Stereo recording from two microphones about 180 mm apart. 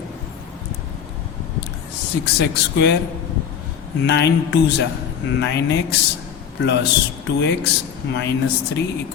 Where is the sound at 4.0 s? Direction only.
70° left (ahead or behind).